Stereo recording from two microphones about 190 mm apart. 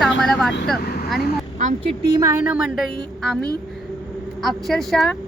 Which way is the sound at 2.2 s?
10° right (ahead or behind).